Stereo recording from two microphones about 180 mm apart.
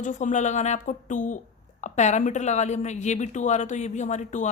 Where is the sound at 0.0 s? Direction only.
45° left (ahead or behind).